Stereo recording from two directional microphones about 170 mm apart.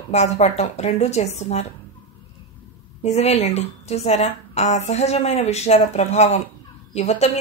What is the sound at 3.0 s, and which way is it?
Speech, 40° left (ahead or behind).